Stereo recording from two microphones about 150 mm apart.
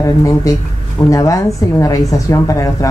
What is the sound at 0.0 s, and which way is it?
A woman's voice, 20° left (ahead or behind).